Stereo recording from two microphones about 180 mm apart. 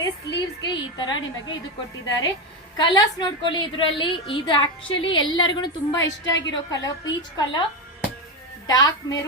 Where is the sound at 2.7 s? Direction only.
25° left (ahead or behind).